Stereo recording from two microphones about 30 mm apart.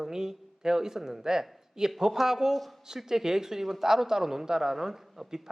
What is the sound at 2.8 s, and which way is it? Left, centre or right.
A man's voice, centre.